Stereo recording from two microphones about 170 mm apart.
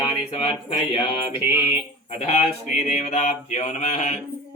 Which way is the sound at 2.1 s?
40° left (ahead or behind).